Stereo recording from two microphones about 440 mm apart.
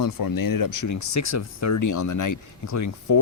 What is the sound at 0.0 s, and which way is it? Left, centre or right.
A man's voice, left.